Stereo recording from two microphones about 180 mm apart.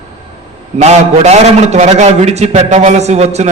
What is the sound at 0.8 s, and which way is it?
A man's voice, 40° right (ahead or behind).